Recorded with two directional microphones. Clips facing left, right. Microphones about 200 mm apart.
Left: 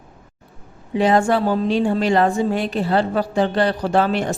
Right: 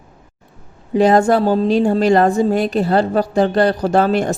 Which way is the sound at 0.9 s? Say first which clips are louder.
Right 4 dB; 40° right (ahead or behind).